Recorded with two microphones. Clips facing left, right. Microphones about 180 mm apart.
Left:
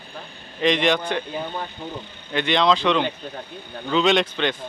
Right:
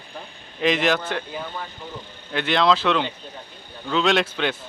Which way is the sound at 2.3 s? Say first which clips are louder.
Even; 5° right (ahead or behind).